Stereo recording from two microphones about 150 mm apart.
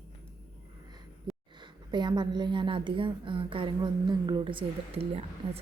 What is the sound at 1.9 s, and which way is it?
A woman's voice, 30° right (ahead or behind).